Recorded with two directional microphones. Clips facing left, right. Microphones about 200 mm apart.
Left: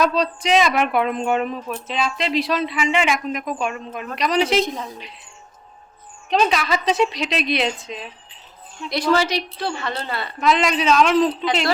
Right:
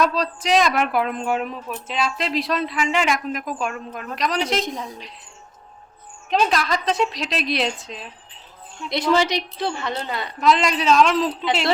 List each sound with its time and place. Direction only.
0.0 s speech: centre (ahead or behind)
6.4 s speech: centre (ahead or behind)
9.1 s a woman's voice: 20° right (ahead or behind)
10.4 s speech: centre (ahead or behind)